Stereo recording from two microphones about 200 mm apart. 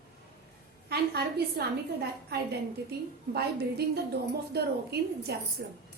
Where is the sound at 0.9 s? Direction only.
50° right (ahead or behind).